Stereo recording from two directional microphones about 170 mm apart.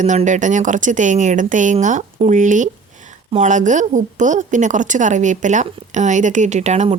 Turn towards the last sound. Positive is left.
turn(degrees=-40)  # may be behind; listen again after turning